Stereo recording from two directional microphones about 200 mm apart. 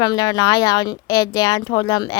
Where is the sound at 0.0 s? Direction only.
20° left (ahead or behind).